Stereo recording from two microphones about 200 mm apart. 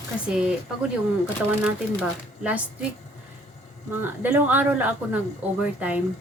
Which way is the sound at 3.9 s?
10° right (ahead or behind).